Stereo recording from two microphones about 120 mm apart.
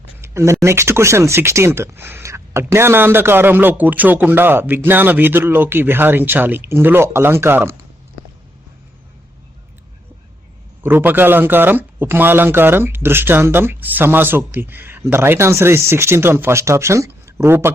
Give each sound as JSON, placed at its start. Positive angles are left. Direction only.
{"t": 0.2, "sound": "a sound", "side_deg": -25}
{"t": 0.6, "sound": "speech", "side_deg": -20}
{"t": 10.8, "sound": "speech", "side_deg": -15}